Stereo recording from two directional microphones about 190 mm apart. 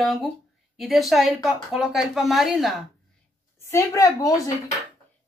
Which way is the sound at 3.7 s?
15° left (ahead or behind).